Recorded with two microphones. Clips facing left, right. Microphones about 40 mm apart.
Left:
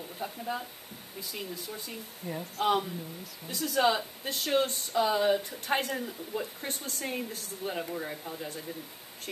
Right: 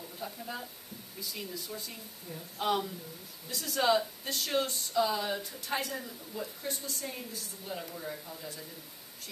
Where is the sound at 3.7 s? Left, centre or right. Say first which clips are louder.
Left 1 dB; centre.